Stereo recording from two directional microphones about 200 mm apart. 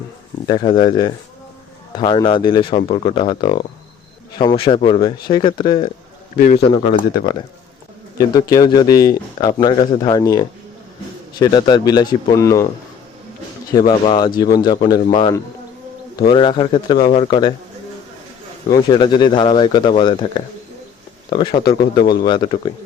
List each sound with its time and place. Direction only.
0.4 s speech: 25° left (ahead or behind)
6.3 s a man's voice: 40° left (ahead or behind)
6.6 s speech: 30° left (ahead or behind)
13.7 s speech: 20° left (ahead or behind)
18.7 s speech: 20° left (ahead or behind)
21.2 s speech: 20° left (ahead or behind)